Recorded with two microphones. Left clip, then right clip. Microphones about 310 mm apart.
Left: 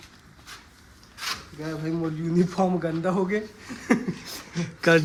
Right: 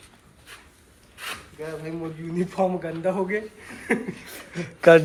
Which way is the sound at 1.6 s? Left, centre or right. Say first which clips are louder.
Left 2 dB; left.